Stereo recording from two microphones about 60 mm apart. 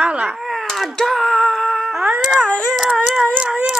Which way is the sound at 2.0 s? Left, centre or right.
Centre.